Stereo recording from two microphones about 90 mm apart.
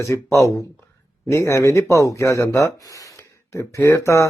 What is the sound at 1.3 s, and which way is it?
Speech, 35° left (ahead or behind).